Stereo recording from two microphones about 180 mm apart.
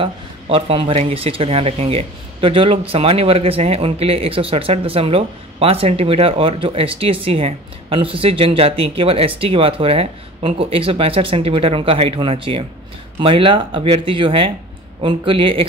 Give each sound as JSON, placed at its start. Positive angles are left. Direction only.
{"t": 0.0, "sound": "speech", "side_deg": -30}